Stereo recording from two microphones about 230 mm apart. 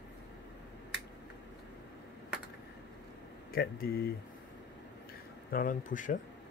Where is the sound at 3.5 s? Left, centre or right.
Left.